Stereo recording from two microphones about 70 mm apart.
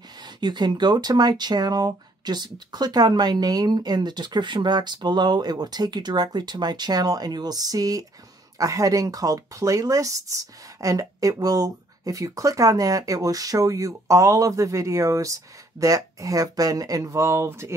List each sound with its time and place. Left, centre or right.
0.4 s speech: right